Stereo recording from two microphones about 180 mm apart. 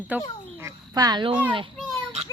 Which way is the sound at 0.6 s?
20° right (ahead or behind).